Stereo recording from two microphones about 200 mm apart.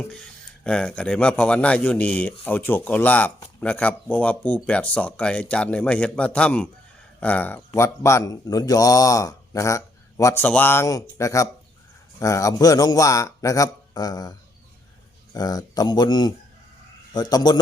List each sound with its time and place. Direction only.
0.6 s a man's voice: 5° left (ahead or behind); by 17.6 s 20° left (ahead or behind)